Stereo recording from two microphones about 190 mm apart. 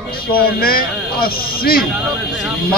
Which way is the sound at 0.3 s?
50° left (ahead or behind).